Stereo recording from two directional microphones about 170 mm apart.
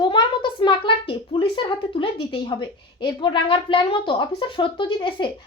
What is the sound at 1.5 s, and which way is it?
A woman's voice, 30° left (ahead or behind).